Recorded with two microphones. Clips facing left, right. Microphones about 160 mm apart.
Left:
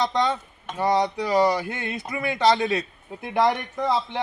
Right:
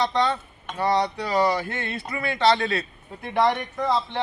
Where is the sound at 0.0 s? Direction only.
20° left (ahead or behind).